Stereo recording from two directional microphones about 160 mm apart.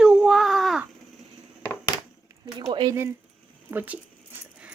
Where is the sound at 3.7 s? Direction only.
10° right (ahead or behind).